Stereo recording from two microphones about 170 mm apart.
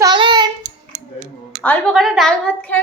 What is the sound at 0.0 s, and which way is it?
Child singing, 25° right (ahead or behind).